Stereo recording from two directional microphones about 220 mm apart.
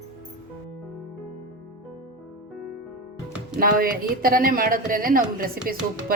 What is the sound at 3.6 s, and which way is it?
A woman's voice, 40° right (ahead or behind).